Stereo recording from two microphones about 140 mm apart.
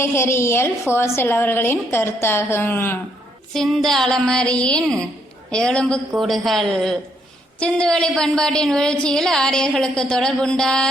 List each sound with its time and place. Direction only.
0.0 s a woman's voice: 20° left (ahead or behind)
3.5 s a woman's voice: centre (ahead or behind)